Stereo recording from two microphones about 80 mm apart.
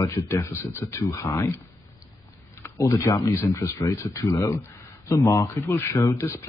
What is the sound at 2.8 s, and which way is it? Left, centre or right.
Speech, left.